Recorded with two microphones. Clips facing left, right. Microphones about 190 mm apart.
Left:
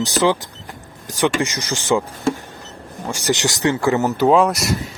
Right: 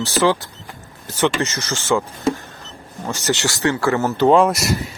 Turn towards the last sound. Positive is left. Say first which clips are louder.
# right 1 dB
turn(degrees=0)  # may be behind; listen again after turning